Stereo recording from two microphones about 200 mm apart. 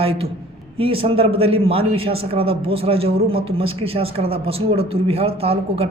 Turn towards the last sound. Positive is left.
turn(degrees=-30)  # may be behind; listen again after turning